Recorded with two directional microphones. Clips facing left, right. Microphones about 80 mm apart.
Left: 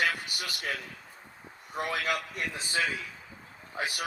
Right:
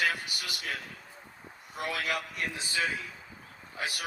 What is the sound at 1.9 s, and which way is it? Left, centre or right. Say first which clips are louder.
Speech: left 1 dB; left.